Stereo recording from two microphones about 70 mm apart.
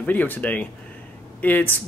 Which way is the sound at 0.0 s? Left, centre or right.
Left.